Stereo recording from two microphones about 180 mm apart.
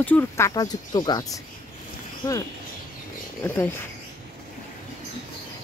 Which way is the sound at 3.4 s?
10° left (ahead or behind).